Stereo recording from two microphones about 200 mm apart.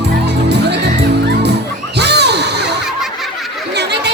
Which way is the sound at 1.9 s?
55° right (ahead or behind).